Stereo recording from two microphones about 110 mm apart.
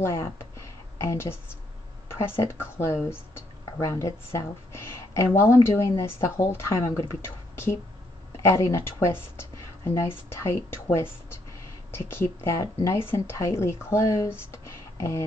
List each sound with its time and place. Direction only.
1.0 s speech: 20° left (ahead or behind)